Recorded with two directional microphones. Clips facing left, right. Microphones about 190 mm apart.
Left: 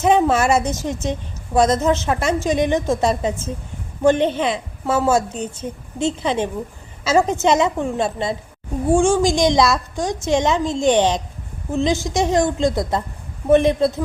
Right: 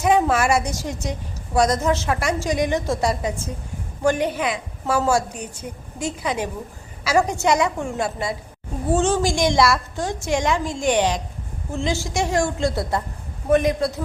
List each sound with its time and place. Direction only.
0.0 s a woman's voice: 25° left (ahead or behind)
8.9 s a woman's voice: 10° left (ahead or behind)